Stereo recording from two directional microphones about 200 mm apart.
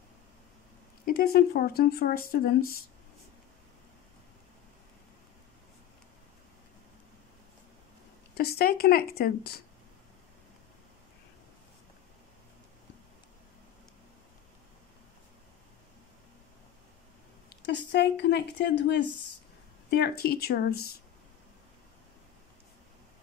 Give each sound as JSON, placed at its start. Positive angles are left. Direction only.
{"t": 1.0, "sound": "speech", "side_deg": 50}
{"t": 8.4, "sound": "speech", "side_deg": 50}
{"t": 17.5, "sound": "speech", "side_deg": 60}